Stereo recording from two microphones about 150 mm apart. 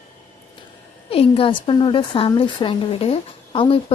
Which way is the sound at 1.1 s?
40° left (ahead or behind).